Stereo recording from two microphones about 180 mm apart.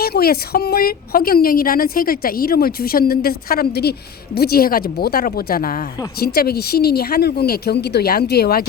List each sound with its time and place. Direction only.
0.0 s a woman's voice: 60° left (ahead or behind)